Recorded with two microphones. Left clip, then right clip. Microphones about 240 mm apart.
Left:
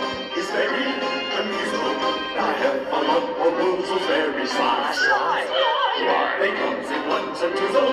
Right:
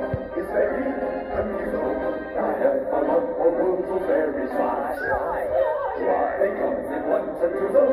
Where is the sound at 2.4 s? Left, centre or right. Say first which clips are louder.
Right 1 dB; left.